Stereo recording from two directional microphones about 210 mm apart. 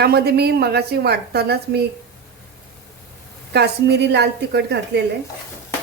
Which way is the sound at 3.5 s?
50° right (ahead or behind).